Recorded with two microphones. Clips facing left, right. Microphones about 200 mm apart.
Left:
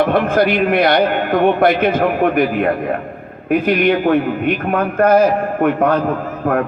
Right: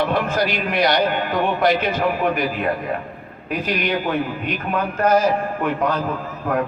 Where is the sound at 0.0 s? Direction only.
55° left (ahead or behind).